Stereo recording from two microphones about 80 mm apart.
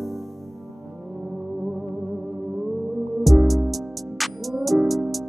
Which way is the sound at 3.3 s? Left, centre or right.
Centre.